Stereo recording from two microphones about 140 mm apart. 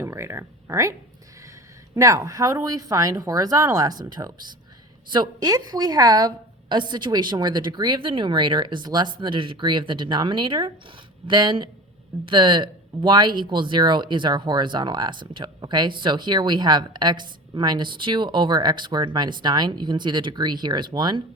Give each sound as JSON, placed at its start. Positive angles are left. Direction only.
{"t": 0.0, "sound": "speech", "side_deg": -20}
{"t": 2.0, "sound": "speech", "side_deg": -20}
{"t": 5.1, "sound": "speech", "side_deg": -30}